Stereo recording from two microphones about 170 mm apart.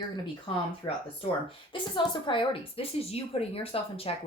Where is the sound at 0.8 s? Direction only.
25° left (ahead or behind).